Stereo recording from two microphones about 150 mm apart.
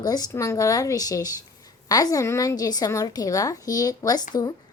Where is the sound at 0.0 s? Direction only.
25° left (ahead or behind).